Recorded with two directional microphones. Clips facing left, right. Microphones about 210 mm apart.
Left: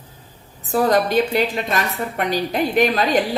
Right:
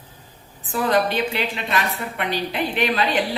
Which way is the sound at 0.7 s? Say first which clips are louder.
Left 4 dB; 40° left (ahead or behind).